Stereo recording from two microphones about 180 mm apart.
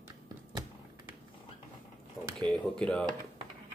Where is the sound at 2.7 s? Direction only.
5° left (ahead or behind).